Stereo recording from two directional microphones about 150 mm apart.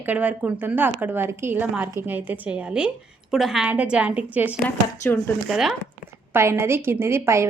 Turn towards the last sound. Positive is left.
turn(degrees=-20)  # may be behind; listen again after turning